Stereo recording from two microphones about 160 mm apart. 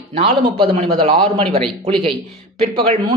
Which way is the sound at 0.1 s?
35° right (ahead or behind).